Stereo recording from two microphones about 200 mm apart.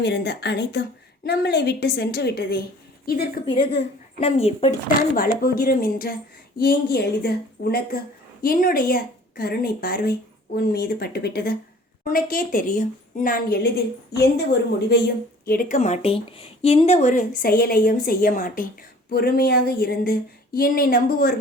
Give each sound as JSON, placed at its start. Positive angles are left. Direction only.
{"t": 0.0, "sound": "a woman's voice", "side_deg": 60}
{"t": 3.4, "sound": "speech", "side_deg": 25}
{"t": 5.1, "sound": "speech", "side_deg": 45}